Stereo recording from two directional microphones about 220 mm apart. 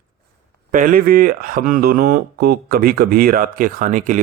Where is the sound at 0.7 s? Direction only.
40° right (ahead or behind).